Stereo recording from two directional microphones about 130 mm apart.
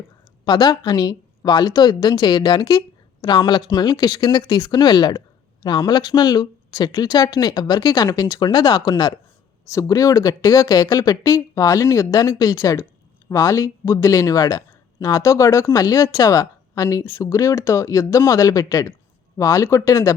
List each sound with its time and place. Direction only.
0.4 s a woman's voice: 35° left (ahead or behind)